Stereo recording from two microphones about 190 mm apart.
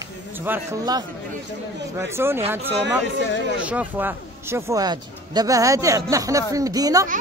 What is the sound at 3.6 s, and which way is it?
Speech, 10° right (ahead or behind).